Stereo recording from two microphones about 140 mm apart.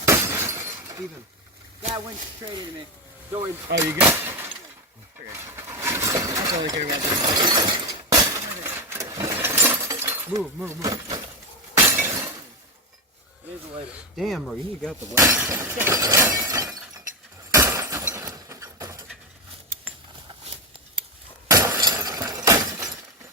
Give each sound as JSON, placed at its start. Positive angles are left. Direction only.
{"t": 0.1, "sound": "shatter", "side_deg": -20}
{"t": 3.3, "sound": "speech", "side_deg": -20}
{"t": 5.3, "sound": "a sound", "side_deg": -15}
{"t": 6.8, "sound": "shatter", "side_deg": -30}
{"t": 8.6, "sound": "a sound", "side_deg": -15}
{"t": 10.6, "sound": "speech", "side_deg": -20}
{"t": 11.9, "sound": "shatter", "side_deg": -15}
{"t": 14.2, "sound": "speech", "side_deg": 0}
{"t": 15.1, "sound": "speech", "side_deg": -20}
{"t": 17.5, "sound": "a sound", "side_deg": -20}
{"t": 21.4, "sound": "glass", "side_deg": -25}